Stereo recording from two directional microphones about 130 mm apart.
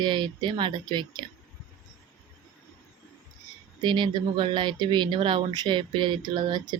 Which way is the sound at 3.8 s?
35° right (ahead or behind).